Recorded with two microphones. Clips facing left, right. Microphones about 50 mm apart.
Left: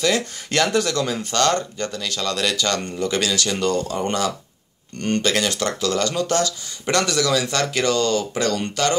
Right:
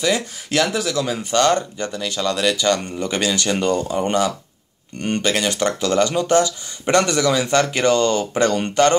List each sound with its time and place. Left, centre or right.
0.0 s speech: centre; by 8.9 s right